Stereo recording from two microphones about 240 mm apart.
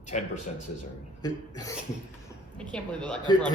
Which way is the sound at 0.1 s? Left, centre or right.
Left.